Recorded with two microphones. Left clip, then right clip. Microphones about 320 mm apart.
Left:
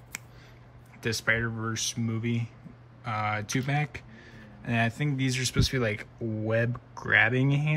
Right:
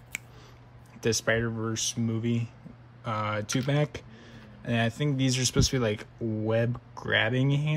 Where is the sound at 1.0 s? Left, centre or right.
Centre.